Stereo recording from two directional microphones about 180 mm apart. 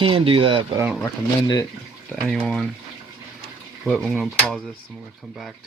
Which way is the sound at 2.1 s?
Centre (ahead or behind).